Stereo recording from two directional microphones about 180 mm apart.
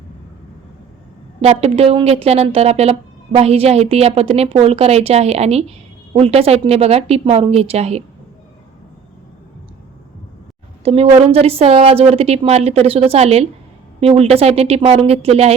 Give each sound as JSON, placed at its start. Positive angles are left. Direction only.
{"t": 1.4, "sound": "speech", "side_deg": -35}
{"t": 10.8, "sound": "speech", "side_deg": -35}